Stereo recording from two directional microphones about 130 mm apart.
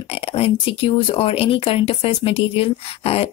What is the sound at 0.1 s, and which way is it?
Speech, 45° left (ahead or behind).